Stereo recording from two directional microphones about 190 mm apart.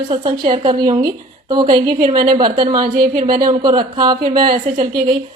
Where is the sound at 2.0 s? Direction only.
45° right (ahead or behind).